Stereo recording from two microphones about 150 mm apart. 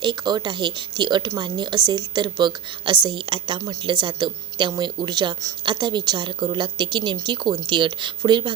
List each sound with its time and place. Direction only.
0.0 s a woman's voice: 30° right (ahead or behind)